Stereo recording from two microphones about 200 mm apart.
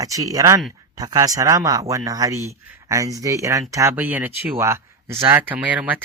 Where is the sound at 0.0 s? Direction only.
15° right (ahead or behind).